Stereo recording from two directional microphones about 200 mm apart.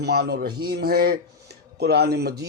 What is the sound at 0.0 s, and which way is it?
Speech, 55° right (ahead or behind).